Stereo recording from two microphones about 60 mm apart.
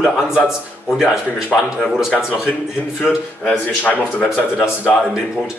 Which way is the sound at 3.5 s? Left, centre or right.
Centre.